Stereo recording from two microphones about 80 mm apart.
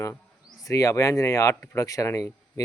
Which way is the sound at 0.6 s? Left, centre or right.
Left.